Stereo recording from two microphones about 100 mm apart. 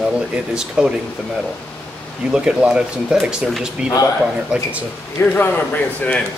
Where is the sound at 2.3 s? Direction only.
10° right (ahead or behind).